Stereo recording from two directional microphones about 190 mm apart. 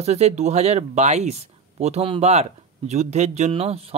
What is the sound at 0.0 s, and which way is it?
Speech, 35° right (ahead or behind).